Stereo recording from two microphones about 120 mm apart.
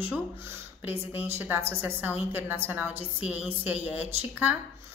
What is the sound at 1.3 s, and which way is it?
A woman's voice, 20° right (ahead or behind).